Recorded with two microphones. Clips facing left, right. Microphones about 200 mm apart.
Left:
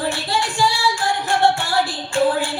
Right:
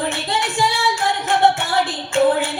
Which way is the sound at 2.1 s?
20° right (ahead or behind).